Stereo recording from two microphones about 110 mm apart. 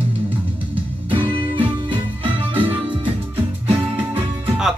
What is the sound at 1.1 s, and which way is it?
Music, 55° right (ahead or behind).